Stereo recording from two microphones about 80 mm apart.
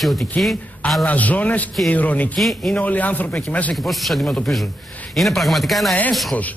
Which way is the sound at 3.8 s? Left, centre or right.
Centre.